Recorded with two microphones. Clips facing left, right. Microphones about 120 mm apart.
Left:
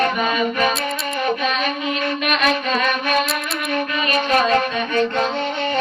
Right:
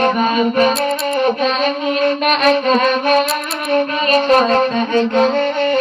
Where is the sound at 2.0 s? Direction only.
40° right (ahead or behind).